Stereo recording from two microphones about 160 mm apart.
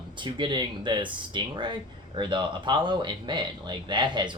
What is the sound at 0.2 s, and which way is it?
Speech, 30° right (ahead or behind).